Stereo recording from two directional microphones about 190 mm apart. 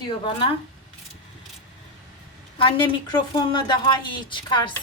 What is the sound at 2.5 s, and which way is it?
A woman's voice, 25° left (ahead or behind).